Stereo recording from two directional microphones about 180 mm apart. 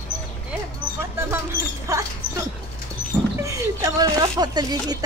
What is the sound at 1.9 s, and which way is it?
Speech, 15° right (ahead or behind).